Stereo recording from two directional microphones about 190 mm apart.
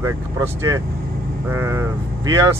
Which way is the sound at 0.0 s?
15° right (ahead or behind).